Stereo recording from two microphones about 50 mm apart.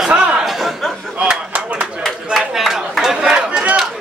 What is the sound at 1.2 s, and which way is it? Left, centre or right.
Speech, centre.